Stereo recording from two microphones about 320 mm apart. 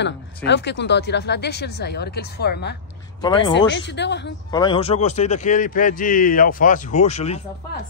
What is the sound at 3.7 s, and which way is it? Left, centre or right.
Speech, left.